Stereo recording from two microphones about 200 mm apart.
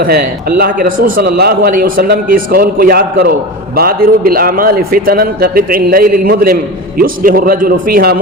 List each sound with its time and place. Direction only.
0.0 s a man's voice: 50° right (ahead or behind)